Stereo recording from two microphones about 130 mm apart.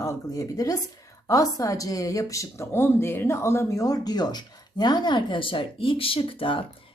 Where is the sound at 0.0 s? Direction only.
25° left (ahead or behind).